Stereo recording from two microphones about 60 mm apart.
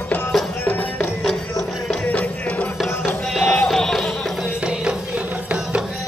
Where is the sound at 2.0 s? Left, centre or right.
Left.